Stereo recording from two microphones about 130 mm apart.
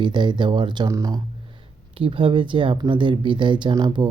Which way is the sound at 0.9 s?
25° right (ahead or behind).